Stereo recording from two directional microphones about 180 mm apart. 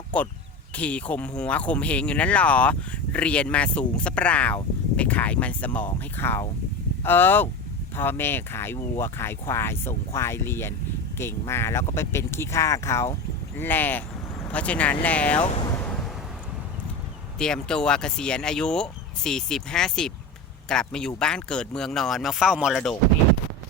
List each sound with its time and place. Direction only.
0.8 s speech: 5° left (ahead or behind)
15.4 s speech: 25° left (ahead or behind)
15.8 s vehicle: 5° left (ahead or behind)
17.3 s speech: 5° left (ahead or behind)